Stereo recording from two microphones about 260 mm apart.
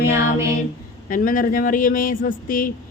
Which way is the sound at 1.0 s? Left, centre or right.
Left.